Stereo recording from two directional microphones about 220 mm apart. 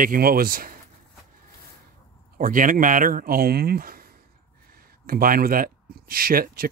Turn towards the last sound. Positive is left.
turn(degrees=-40)  # may be behind; listen again after turning